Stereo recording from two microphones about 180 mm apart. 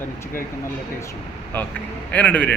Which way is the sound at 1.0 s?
15° left (ahead or behind).